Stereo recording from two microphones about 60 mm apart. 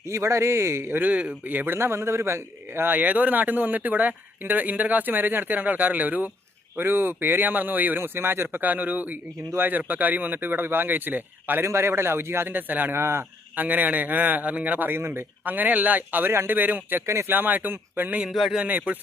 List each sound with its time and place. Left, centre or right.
0.1 s speech: right
0.9 s a man's voice: right
11.6 s speech: right
13.0 s speech: right
13.6 s a man's voice: right
17.1 s speech: right
17.3 s speech: right
18.3 s speech: centre
18.6 s a man's voice: right